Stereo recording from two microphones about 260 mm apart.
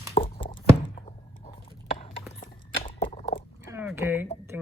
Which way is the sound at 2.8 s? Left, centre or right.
Left.